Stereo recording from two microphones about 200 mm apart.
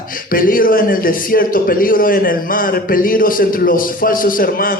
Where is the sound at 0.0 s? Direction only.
45° left (ahead or behind).